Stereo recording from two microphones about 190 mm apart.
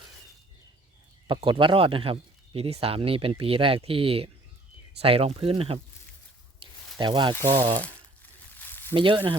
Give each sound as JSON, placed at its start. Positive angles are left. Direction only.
{"t": 1.3, "sound": "speech", "side_deg": -25}
{"t": 7.0, "sound": "speech", "side_deg": -25}
{"t": 8.5, "sound": "a sound", "side_deg": 10}
{"t": 9.0, "sound": "speech", "side_deg": -25}